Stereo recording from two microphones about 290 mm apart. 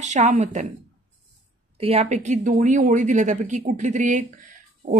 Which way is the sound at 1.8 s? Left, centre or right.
Right.